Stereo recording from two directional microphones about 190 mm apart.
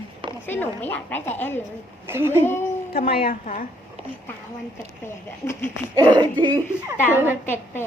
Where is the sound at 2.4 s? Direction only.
10° left (ahead or behind).